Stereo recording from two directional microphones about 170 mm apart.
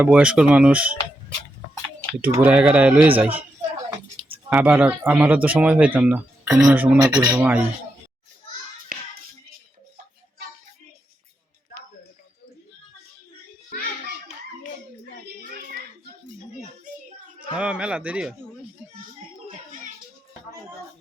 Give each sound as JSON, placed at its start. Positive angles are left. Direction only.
{"t": 0.0, "sound": "speech", "side_deg": -5}
{"t": 2.2, "sound": "speech", "side_deg": -10}
{"t": 7.0, "sound": "speech", "side_deg": -25}
{"t": 7.3, "sound": "speech", "side_deg": -10}
{"t": 8.9, "sound": "music", "side_deg": -55}
{"t": 17.5, "sound": "speech", "side_deg": -10}